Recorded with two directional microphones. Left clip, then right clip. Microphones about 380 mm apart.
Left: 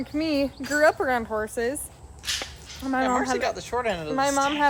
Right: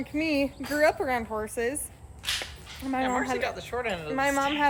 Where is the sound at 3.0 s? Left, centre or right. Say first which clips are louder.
Left 4 dB; centre.